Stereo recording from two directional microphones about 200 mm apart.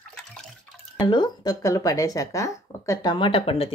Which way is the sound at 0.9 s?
20° left (ahead or behind).